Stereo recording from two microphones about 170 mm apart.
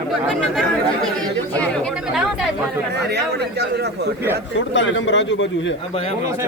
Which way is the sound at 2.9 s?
75° right (ahead or behind).